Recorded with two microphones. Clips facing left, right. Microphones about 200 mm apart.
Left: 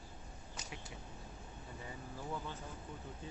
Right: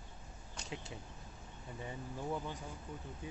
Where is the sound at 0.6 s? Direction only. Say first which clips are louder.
Right 7 dB; 25° right (ahead or behind).